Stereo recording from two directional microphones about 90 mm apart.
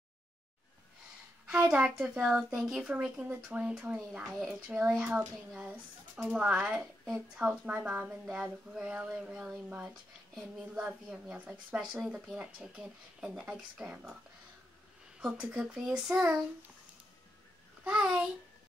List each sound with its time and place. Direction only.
1.5 s a woman's voice: 10° right (ahead or behind)
6.3 s a woman's voice: 10° right (ahead or behind)
15.1 s a woman's voice: 10° right (ahead or behind)
17.8 s a woman's voice: 10° right (ahead or behind)